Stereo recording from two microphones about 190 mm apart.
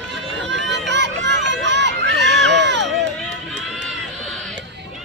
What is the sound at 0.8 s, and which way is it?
Run, 65° right (ahead or behind).